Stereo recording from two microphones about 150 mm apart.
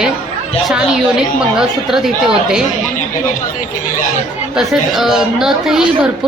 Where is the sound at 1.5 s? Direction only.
5° right (ahead or behind).